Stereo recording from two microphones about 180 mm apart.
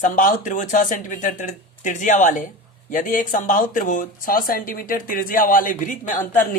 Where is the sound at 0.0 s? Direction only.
45° left (ahead or behind).